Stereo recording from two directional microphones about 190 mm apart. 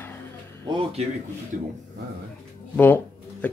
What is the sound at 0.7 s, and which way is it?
Speech, 25° right (ahead or behind).